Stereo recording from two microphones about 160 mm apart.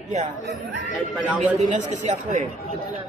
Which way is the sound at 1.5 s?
50° right (ahead or behind).